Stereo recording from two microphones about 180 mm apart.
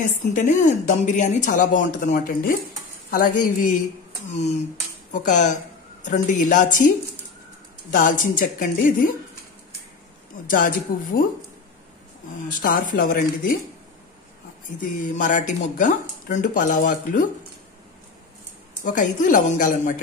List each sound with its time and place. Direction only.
0.0 s a woman's voice: 45° left (ahead or behind)
7.9 s a woman's voice: 45° left (ahead or behind)
10.4 s a woman's voice: 50° left (ahead or behind)
12.4 s a woman's voice: 50° left (ahead or behind)
14.8 s a woman's voice: 45° left (ahead or behind)
18.9 s a woman's voice: 45° left (ahead or behind)